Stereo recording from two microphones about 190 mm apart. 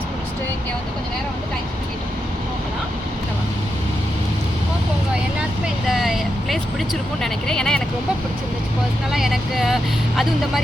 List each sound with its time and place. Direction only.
5.9 s speech: centre (ahead or behind)
9.1 s speech: centre (ahead or behind)